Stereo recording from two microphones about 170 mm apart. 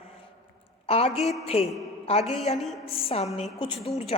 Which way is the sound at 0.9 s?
35° left (ahead or behind).